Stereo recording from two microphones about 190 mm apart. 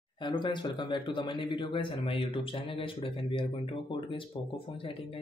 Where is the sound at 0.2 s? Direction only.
25° left (ahead or behind).